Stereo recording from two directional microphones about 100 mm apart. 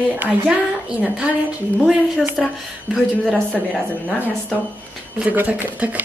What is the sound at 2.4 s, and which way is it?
Speech, 5° left (ahead or behind).